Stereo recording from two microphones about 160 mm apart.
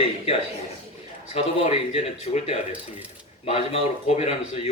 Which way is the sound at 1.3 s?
40° left (ahead or behind).